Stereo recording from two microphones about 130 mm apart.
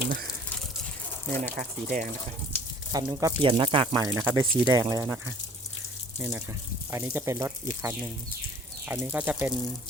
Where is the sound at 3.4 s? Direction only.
40° right (ahead or behind).